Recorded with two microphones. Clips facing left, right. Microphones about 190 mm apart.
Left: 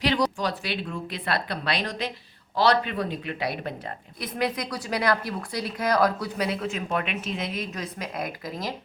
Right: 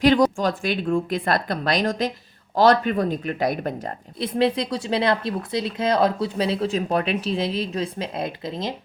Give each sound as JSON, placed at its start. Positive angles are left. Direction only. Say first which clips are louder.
{"t": 0.0, "sound": "speech", "louder": "right 7 dB", "side_deg": -50}
{"t": 4.2, "sound": "speech", "louder": "right 7 dB", "side_deg": -30}